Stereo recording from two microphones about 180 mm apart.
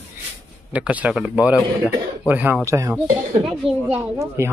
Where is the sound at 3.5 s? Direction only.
Centre (ahead or behind).